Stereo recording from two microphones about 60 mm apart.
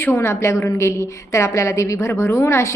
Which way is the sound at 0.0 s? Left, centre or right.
Left.